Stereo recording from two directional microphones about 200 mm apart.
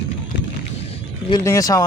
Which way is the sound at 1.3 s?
20° left (ahead or behind).